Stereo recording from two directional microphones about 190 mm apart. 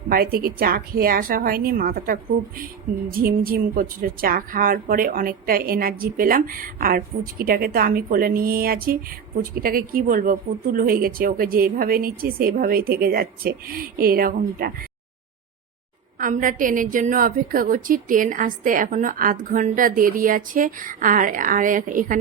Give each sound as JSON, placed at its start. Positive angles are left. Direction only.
{"t": 0.1, "sound": "a woman's voice", "side_deg": -50}
{"t": 16.1, "sound": "a woman's voice", "side_deg": -45}